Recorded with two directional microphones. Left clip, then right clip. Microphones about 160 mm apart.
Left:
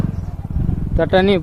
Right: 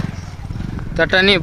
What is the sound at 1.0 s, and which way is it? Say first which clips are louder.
Speech: right 2 dB; centre (ahead or behind).